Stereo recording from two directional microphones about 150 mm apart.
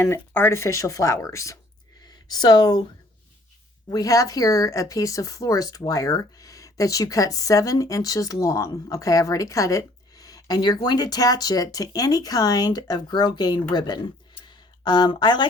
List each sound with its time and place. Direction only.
0.3 s speech: 15° left (ahead or behind)
3.8 s speech: 25° left (ahead or behind)